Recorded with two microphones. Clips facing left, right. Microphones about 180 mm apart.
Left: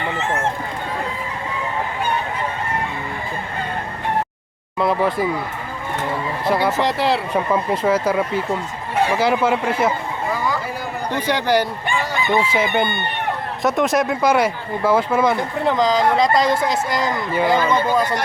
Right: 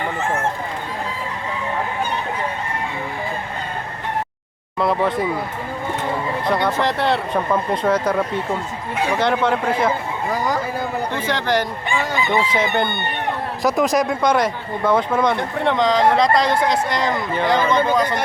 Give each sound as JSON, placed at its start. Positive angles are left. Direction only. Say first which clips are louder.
{"t": 4.8, "sound": "speech", "louder": "even", "side_deg": 0}
{"t": 6.4, "sound": "speech", "louder": "left 2 dB", "side_deg": 5}
{"t": 10.3, "sound": "a sound", "louder": "right 2 dB", "side_deg": -40}
{"t": 11.1, "sound": "chicken", "louder": "left 5 dB", "side_deg": 10}
{"t": 13.6, "sound": "speech", "louder": "even", "side_deg": 0}